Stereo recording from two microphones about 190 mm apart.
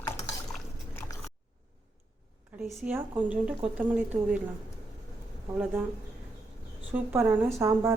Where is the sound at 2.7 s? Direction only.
Centre (ahead or behind).